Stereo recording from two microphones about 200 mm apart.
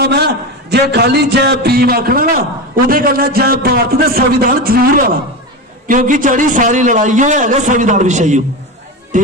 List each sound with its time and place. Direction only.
0.0 s a man's voice: 55° right (ahead or behind); by 9.3 s 40° right (ahead or behind)